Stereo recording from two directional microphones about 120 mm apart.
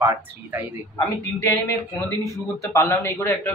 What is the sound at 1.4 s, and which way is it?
A man's voice, 20° left (ahead or behind).